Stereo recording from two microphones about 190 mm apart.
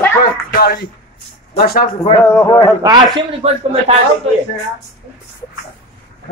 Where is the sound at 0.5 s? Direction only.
55° left (ahead or behind).